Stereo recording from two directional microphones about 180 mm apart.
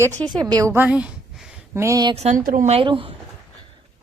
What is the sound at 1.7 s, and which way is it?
Speech, 15° right (ahead or behind).